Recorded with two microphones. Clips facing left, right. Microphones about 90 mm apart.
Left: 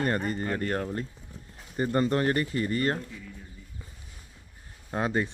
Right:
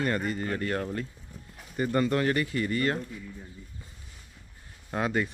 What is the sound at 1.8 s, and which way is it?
Speech, 30° left (ahead or behind).